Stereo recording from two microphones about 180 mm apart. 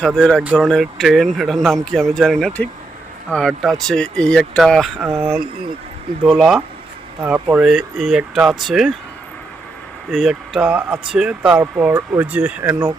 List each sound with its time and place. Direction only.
0.3 s speech: centre (ahead or behind)
10.1 s speech: centre (ahead or behind)